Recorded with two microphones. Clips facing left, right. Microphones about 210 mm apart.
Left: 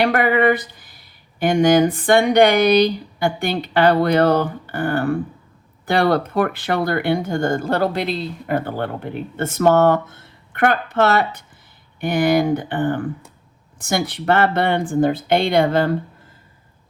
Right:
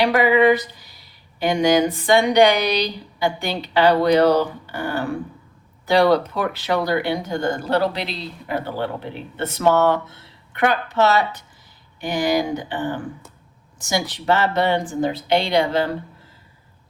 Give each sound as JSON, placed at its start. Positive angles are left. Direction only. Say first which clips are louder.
{"t": 0.0, "sound": "speech", "louder": "right 1 dB", "side_deg": 55}